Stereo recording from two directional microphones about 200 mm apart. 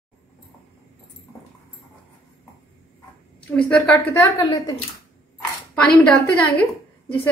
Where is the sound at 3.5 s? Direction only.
10° left (ahead or behind).